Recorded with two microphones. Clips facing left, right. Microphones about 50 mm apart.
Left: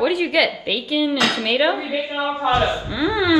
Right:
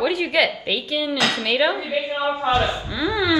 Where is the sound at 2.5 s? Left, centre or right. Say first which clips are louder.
Left 2 dB; left.